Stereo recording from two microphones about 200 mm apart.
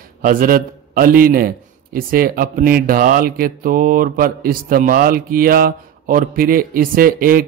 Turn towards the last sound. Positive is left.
turn(degrees=-45)  # may be behind; listen again after turning